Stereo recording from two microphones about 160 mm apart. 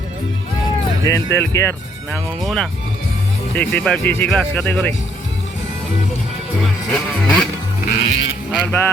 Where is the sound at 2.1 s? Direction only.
Centre (ahead or behind).